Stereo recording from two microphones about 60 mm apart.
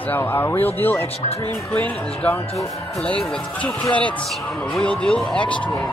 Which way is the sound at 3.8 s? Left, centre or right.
Left.